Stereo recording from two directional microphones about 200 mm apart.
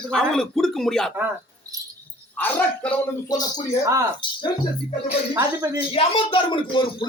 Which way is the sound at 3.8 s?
15° right (ahead or behind).